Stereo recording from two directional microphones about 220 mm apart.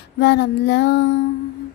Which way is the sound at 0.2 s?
50° left (ahead or behind).